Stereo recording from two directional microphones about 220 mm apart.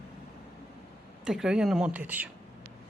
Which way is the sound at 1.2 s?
5° right (ahead or behind).